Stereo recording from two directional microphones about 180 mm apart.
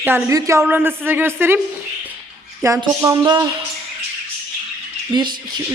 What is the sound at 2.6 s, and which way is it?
Speech, 20° right (ahead or behind).